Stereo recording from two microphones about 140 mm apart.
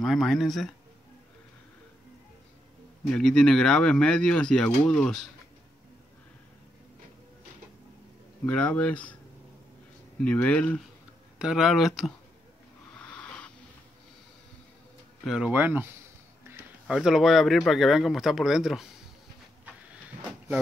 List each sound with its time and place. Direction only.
0.0 s speech: centre (ahead or behind)
3.1 s speech: 5° left (ahead or behind)
8.5 s speech: 10° left (ahead or behind)
10.2 s speech: 10° left (ahead or behind)
11.3 s speech: 5° right (ahead or behind)
13.0 s wheeze: 10° left (ahead or behind)
15.2 s speech: 5° right (ahead or behind)
15.5 s speech: 15° right (ahead or behind)
16.5 s a sound: 15° right (ahead or behind)
16.8 s speech: 5° right (ahead or behind)